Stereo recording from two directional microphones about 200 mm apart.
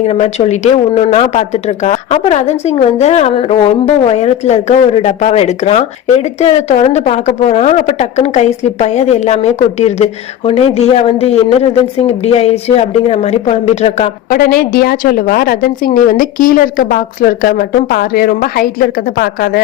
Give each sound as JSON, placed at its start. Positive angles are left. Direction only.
{"t": 0.1, "sound": "a woman's voice", "side_deg": 35}
{"t": 14.3, "sound": "a woman's voice", "side_deg": 45}